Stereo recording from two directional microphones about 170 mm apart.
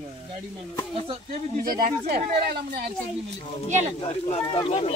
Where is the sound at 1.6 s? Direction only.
60° right (ahead or behind).